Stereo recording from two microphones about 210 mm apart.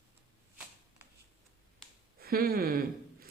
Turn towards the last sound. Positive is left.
turn(degrees=-45)  # may be behind; listen again after turning